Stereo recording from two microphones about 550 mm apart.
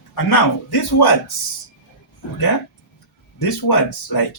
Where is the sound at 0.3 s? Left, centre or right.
Left.